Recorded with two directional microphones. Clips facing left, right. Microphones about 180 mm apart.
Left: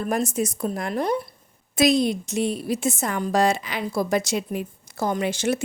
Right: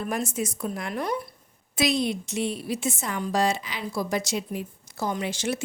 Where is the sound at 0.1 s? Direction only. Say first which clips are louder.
Left 5 dB; 40° left (ahead or behind).